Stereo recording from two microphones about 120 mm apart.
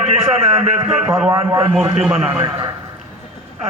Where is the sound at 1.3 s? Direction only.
25° right (ahead or behind).